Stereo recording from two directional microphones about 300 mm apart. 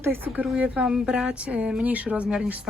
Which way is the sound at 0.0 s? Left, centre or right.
Centre.